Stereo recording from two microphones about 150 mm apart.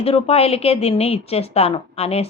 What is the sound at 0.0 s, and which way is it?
A woman's voice, 40° left (ahead or behind).